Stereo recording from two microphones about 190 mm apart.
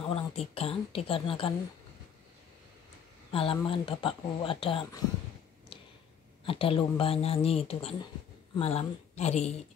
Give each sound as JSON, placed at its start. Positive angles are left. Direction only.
{"t": 0.1, "sound": "speech", "side_deg": 30}
{"t": 3.3, "sound": "speech", "side_deg": 30}
{"t": 5.7, "sound": "tick-tock", "side_deg": 30}
{"t": 6.4, "sound": "speech", "side_deg": 30}